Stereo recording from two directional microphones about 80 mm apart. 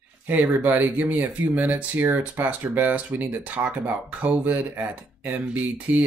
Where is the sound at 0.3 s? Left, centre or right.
Right.